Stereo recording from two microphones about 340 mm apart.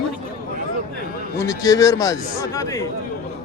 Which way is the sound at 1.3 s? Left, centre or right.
Centre.